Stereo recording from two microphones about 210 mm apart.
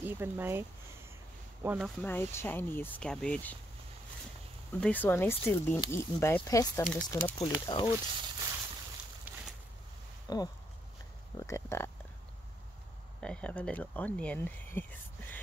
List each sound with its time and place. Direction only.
0.0 s speech: 10° right (ahead or behind)
2.0 s speech: 10° left (ahead or behind)
4.7 s speech: 5° left (ahead or behind)
7.3 s speech: 20° left (ahead or behind)
9.3 s a sound: 10° right (ahead or behind)
10.3 s speech: 20° left (ahead or behind)
13.2 s speech: 5° left (ahead or behind)